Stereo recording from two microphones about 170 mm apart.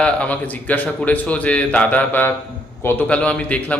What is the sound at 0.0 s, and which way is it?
A man's voice, 10° left (ahead or behind).